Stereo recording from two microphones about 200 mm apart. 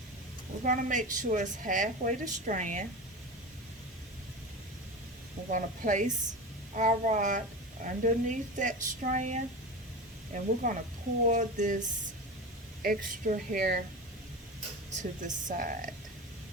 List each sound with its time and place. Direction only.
0.6 s speech: 40° right (ahead or behind)
5.5 s speech: 40° right (ahead or behind)
14.8 s speech: 35° right (ahead or behind)